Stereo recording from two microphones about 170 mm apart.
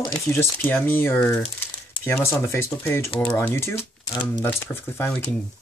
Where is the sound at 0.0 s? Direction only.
25° left (ahead or behind).